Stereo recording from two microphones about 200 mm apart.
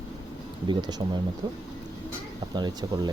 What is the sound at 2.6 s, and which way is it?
Speech, 20° right (ahead or behind).